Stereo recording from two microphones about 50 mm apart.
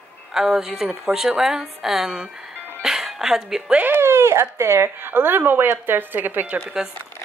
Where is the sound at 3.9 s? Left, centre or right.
Right.